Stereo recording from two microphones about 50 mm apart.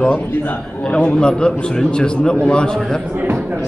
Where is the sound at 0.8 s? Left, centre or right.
Left.